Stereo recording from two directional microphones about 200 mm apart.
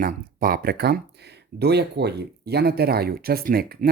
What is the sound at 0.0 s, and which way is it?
Speech, 45° right (ahead or behind).